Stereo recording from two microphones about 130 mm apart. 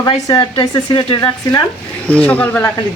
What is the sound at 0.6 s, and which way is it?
Speech, 40° left (ahead or behind).